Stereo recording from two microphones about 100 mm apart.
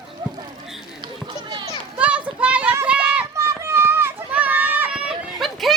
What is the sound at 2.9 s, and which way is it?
Run, 15° right (ahead or behind).